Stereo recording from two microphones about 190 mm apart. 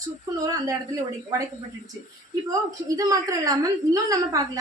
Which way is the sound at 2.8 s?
20° right (ahead or behind).